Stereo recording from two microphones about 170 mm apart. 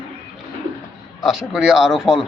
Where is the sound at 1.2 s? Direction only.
Centre (ahead or behind).